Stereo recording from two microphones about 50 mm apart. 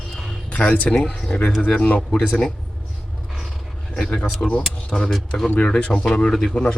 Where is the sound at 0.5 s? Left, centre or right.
Left.